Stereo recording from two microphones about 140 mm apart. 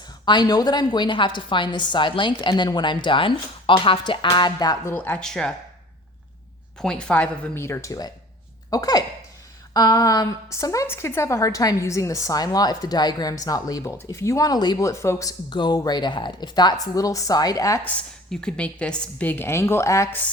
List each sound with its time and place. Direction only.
0.0 s a woman's voice: 30° left (ahead or behind)
4.9 s a woman's voice: 10° left (ahead or behind)
6.7 s a woman's voice: 5° left (ahead or behind); by 17.8 s 25° left (ahead or behind)
17.8 s a woman's voice: 5° left (ahead or behind)